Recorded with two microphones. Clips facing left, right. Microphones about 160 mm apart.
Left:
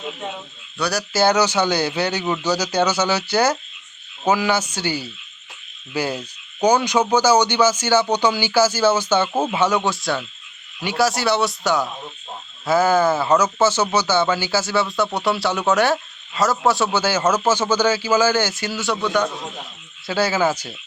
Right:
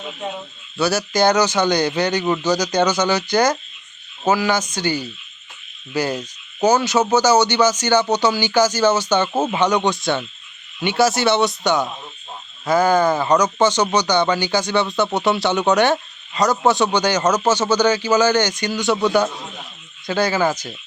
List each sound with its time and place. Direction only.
0.8 s speech: centre (ahead or behind)
18.9 s a man's voice: 35° right (ahead or behind)
20.1 s speech: 5° left (ahead or behind)